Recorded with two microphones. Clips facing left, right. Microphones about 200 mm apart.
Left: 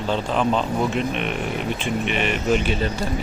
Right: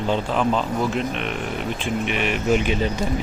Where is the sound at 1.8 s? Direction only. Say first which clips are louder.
Even; 5° right (ahead or behind).